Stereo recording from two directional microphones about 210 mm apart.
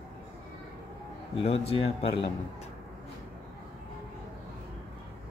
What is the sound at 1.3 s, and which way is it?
A man's voice, 30° left (ahead or behind).